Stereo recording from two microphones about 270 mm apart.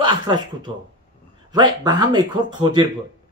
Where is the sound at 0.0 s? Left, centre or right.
Centre.